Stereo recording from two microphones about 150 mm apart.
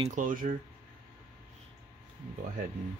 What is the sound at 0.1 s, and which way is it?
Speech, 65° right (ahead or behind).